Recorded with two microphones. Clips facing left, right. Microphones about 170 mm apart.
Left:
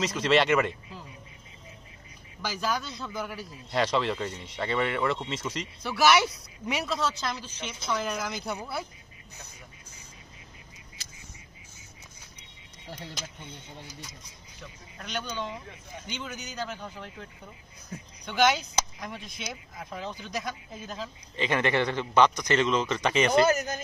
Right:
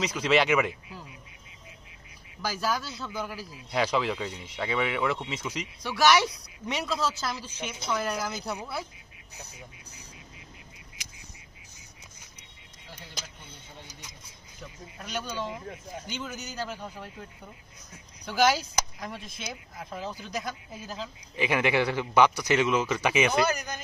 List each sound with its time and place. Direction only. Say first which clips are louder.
0.0 s speech: left 1 dB; centre (ahead or behind)
2.5 s speech: even; 5° right (ahead or behind)
14.6 s speech: right 2 dB; 5° right (ahead or behind)
23.4 s speech: left 4 dB; 45° left (ahead or behind)